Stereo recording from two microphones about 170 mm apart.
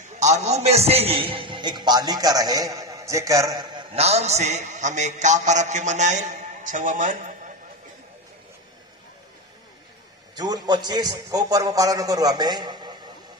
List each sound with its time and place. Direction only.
0.2 s a man's voice: 40° right (ahead or behind); by 3.8 s 20° right (ahead or behind)
3.9 s a man's voice: 40° right (ahead or behind)
10.3 s a man's voice: 25° right (ahead or behind)